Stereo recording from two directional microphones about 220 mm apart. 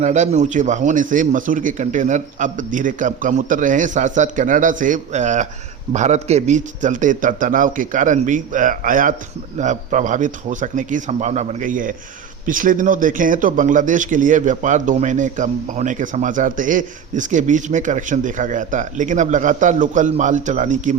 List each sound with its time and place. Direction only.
0.0 s speech: 30° right (ahead or behind)